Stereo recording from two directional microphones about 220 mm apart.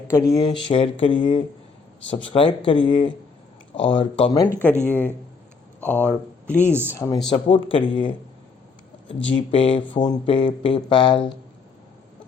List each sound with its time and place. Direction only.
0.1 s speech: 15° left (ahead or behind)
6.7 s speech: 10° right (ahead or behind)
6.9 s speech: 15° left (ahead or behind)
7.3 s speech: 25° left (ahead or behind)
9.5 s speech: 25° left (ahead or behind)